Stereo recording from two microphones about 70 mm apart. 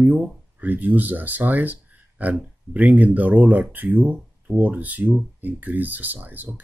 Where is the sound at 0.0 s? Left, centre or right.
Right.